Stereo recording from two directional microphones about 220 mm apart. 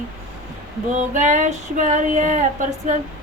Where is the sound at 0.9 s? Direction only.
35° right (ahead or behind).